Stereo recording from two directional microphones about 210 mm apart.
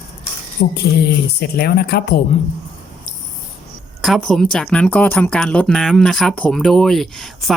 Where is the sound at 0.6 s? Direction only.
45° left (ahead or behind).